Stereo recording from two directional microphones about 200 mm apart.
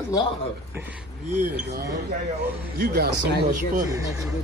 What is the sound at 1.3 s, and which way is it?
Speech, 40° right (ahead or behind).